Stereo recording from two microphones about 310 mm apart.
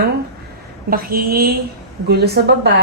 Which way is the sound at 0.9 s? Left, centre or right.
Right.